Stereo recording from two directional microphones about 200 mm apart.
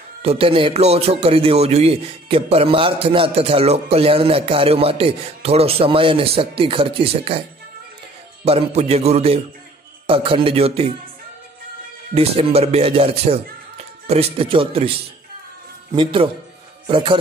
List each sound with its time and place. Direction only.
0.2 s a man's voice: 30° right (ahead or behind)
8.5 s a man's voice: 30° right (ahead or behind)
12.1 s a man's voice: 30° right (ahead or behind)